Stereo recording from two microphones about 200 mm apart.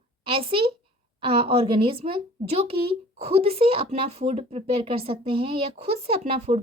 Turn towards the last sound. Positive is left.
turn(degrees=-30)  # may be behind; listen again after turning